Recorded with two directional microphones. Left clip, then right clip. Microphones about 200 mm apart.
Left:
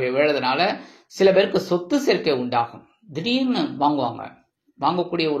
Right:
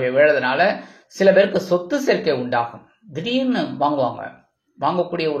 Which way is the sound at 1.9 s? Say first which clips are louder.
Left 1 dB; 25° left (ahead or behind).